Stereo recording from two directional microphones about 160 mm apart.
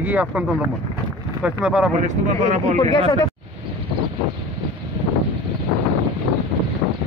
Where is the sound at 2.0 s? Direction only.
50° right (ahead or behind).